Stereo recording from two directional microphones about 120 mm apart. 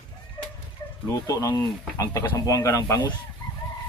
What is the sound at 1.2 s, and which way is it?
Speech, 30° left (ahead or behind).